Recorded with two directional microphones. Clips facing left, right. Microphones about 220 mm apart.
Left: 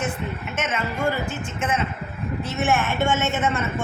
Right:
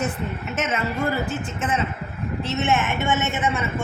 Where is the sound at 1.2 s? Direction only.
35° right (ahead or behind).